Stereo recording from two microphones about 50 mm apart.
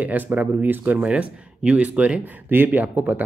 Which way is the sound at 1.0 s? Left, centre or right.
Right.